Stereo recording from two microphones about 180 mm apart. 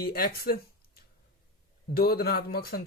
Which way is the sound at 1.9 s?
60° left (ahead or behind).